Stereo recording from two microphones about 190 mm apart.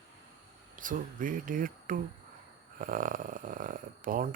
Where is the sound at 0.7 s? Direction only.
45° right (ahead or behind).